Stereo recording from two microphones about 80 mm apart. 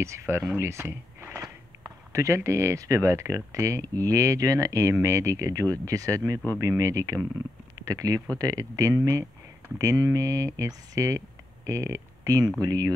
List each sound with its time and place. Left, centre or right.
0.0 s speech: right